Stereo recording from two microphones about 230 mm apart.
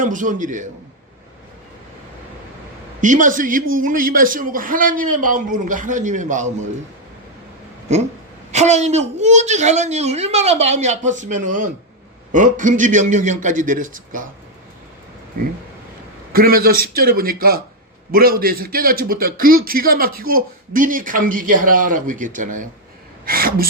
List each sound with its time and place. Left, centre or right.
0.0 s a man's voice: right
3.0 s a man's voice: right
8.5 s a woman's voice: right
16.3 s a man's voice: right